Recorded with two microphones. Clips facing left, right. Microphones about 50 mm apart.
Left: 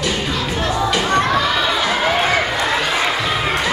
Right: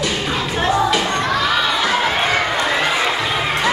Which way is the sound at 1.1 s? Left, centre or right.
Centre.